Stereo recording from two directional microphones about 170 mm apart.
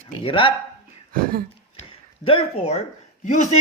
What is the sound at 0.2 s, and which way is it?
Speech, 30° left (ahead or behind).